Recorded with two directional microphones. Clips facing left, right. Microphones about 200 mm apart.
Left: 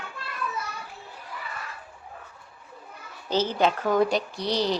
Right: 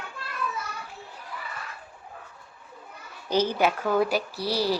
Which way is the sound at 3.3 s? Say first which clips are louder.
Even; 10° right (ahead or behind).